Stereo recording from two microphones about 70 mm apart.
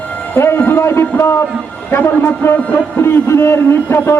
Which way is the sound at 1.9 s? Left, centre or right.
Left.